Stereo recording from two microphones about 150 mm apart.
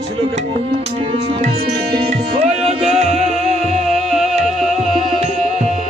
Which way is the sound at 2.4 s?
45° right (ahead or behind).